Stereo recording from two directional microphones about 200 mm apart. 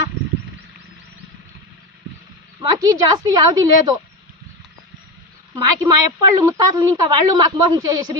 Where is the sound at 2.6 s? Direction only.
20° right (ahead or behind).